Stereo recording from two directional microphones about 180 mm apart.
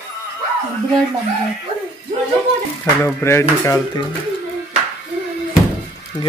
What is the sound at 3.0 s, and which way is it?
Speech, 15° left (ahead or behind).